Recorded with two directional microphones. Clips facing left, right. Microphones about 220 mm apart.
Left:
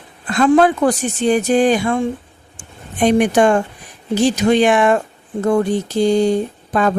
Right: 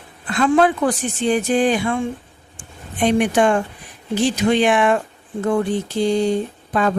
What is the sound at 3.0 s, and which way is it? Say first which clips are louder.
Speech: left 3 dB; 45° left (ahead or behind).